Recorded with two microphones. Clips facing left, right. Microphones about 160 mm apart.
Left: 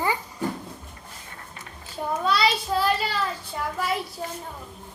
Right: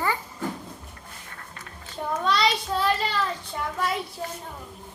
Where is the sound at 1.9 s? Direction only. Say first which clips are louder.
Left 1 dB; 5° left (ahead or behind).